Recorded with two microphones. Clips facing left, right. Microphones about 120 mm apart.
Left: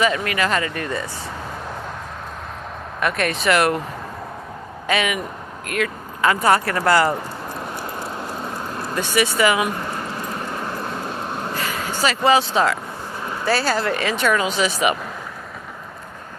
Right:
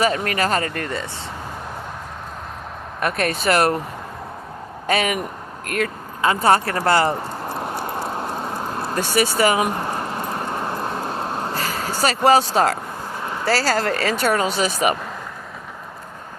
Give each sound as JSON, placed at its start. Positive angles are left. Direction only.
{"t": 0.0, "sound": "speech", "side_deg": -40}
{"t": 3.0, "sound": "speech", "side_deg": -40}
{"t": 4.9, "sound": "speech", "side_deg": -40}
{"t": 6.2, "sound": "speech", "side_deg": -30}
{"t": 9.0, "sound": "speech", "side_deg": -40}
{"t": 11.5, "sound": "vehicle", "side_deg": -35}
{"t": 13.4, "sound": "speech", "side_deg": -35}